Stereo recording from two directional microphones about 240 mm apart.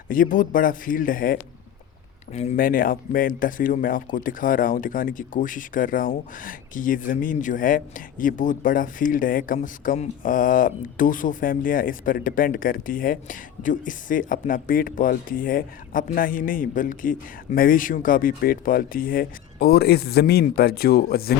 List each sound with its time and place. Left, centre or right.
0.1 s speech: left